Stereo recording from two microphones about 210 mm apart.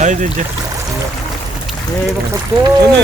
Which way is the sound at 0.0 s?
35° right (ahead or behind).